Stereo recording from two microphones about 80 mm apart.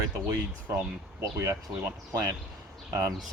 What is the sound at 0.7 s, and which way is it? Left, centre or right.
Speech, right.